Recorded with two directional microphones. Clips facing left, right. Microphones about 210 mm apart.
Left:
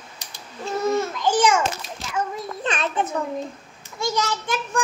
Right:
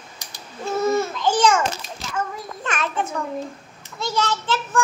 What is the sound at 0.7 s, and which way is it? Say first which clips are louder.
Speech: right 2 dB; 5° right (ahead or behind).